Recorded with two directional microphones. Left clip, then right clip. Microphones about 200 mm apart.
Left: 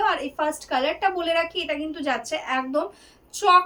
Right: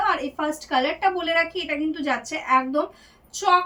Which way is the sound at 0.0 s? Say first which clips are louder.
Even; 25° left (ahead or behind).